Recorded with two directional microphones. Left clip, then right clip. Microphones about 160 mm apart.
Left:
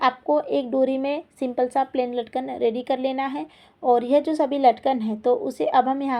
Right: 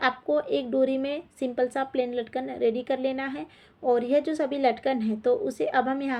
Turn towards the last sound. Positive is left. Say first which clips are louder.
# left 5 dB
turn(degrees=25)  # may be behind; listen again after turning